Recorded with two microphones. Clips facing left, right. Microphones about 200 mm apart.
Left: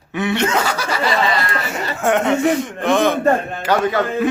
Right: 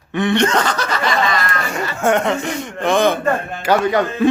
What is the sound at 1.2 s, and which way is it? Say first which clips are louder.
Speech: left 1 dB; 30° left (ahead or behind).